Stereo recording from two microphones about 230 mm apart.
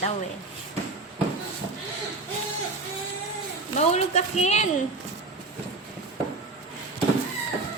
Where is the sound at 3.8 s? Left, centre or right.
Left.